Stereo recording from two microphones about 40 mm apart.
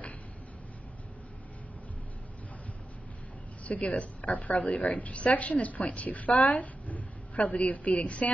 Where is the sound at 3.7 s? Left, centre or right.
Left.